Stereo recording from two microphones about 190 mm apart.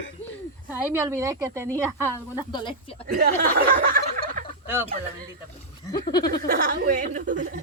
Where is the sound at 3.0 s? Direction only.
45° right (ahead or behind).